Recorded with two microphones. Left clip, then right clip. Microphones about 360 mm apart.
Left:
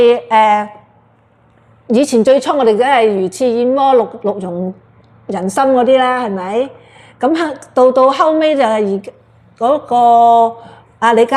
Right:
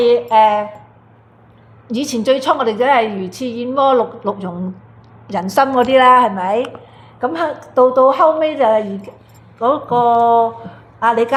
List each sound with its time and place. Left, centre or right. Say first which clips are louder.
0.0 s a woman's voice: left 2 dB; left
1.9 s a woman's voice: left 7 dB; left
7.2 s a woman's voice: left 4 dB; left